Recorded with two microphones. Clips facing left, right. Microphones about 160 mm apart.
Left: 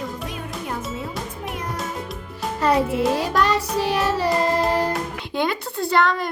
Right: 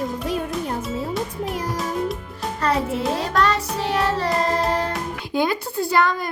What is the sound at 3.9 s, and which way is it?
Music, 10° left (ahead or behind).